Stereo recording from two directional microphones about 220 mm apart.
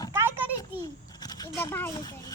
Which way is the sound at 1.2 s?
15° left (ahead or behind).